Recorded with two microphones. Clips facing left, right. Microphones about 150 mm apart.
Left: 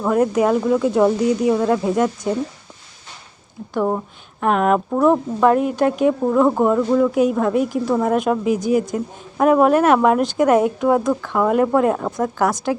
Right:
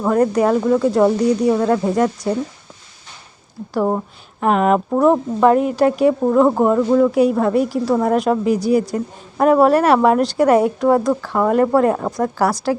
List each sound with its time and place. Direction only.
0.1 s a woman's voice: 5° left (ahead or behind)
3.8 s a woman's voice: 10° right (ahead or behind)